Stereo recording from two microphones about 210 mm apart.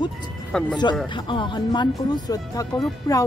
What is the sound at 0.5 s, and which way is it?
Speech, 5° left (ahead or behind).